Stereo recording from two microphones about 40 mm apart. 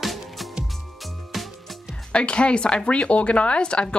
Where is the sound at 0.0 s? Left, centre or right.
Centre.